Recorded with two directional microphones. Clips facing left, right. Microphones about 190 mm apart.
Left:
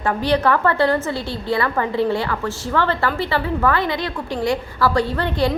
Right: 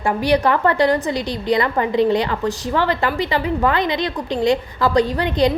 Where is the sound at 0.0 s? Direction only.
10° right (ahead or behind).